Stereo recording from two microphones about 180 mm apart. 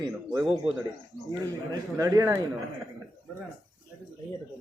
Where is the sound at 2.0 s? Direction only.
15° right (ahead or behind).